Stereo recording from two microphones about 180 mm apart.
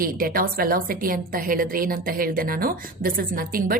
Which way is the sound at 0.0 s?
50° right (ahead or behind).